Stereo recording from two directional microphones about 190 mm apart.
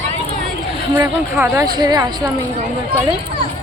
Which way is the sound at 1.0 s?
15° right (ahead or behind).